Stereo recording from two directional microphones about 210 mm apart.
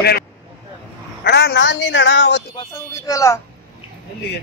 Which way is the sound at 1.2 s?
55° left (ahead or behind).